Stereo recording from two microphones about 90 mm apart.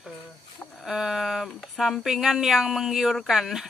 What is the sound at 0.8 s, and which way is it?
Speech, 5° right (ahead or behind).